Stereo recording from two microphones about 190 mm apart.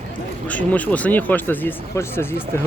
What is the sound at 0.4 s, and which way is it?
Speech, 10° left (ahead or behind).